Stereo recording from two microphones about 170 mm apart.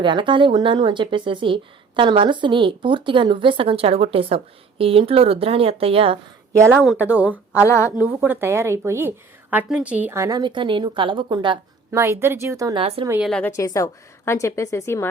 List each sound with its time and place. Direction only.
0.0 s a woman's voice: 30° right (ahead or behind)
6.5 s a woman's voice: 15° right (ahead or behind)
7.5 s speech: 15° left (ahead or behind)
8.0 s a woman's voice: 10° right (ahead or behind); by 11.6 s 25° right (ahead or behind)
11.9 s a woman's voice: 15° right (ahead or behind)
13.2 s a woman's voice: 5° left (ahead or behind)
13.6 s a woman's voice: 20° left (ahead or behind)